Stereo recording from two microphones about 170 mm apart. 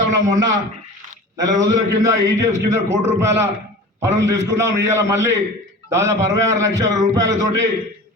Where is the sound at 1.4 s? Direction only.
20° right (ahead or behind).